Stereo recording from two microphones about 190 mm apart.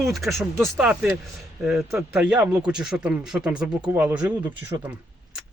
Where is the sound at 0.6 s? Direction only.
Centre (ahead or behind).